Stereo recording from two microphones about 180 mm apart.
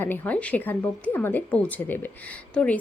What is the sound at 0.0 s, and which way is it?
A woman's voice, 10° left (ahead or behind).